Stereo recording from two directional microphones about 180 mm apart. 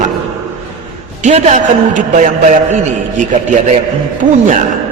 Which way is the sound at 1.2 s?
40° right (ahead or behind).